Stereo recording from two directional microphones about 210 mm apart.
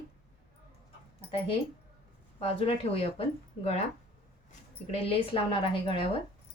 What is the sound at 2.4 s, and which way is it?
Speech, 25° left (ahead or behind).